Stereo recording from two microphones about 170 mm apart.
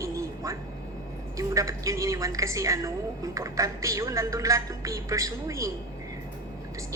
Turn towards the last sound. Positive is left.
turn(degrees=-20)  # may be behind; listen again after turning